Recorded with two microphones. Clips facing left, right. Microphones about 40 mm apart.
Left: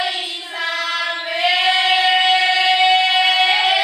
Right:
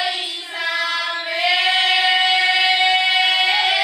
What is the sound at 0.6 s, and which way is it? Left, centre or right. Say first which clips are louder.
Singing: even; centre.